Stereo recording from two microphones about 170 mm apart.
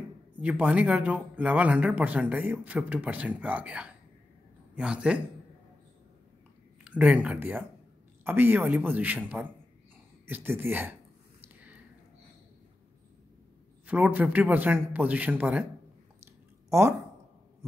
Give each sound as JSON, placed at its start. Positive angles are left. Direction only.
{"t": 0.4, "sound": "a man's voice", "side_deg": -10}
{"t": 6.8, "sound": "speech", "side_deg": -10}
{"t": 10.2, "sound": "speech", "side_deg": -15}
{"t": 11.4, "sound": "a sound", "side_deg": -10}
{"t": 13.8, "sound": "speech", "side_deg": -5}
{"t": 16.6, "sound": "a sound", "side_deg": -15}